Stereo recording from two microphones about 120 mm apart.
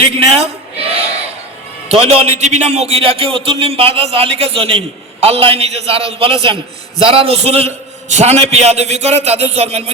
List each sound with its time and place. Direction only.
0.0 s a man's voice: 55° right (ahead or behind)